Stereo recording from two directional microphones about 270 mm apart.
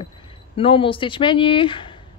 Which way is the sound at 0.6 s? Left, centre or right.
Centre.